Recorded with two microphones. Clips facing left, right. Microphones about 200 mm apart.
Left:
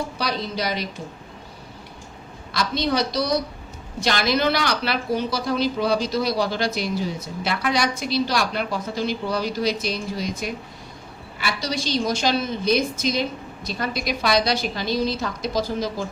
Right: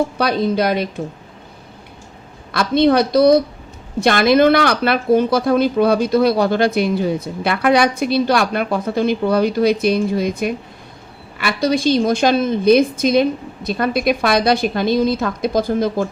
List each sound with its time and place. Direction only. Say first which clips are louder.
0.2 s speech: right 9 dB; 55° right (ahead or behind)
2.5 s speech: right 10 dB; 55° right (ahead or behind)